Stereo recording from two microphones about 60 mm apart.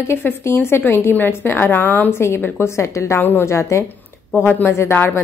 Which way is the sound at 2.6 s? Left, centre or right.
Left.